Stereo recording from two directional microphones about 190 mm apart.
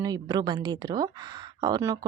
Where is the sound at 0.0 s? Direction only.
20° right (ahead or behind).